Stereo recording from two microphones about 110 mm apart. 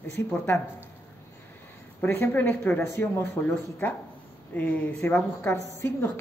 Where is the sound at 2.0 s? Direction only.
20° left (ahead or behind).